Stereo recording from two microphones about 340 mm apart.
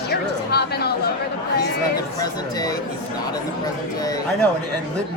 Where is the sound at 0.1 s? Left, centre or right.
Left.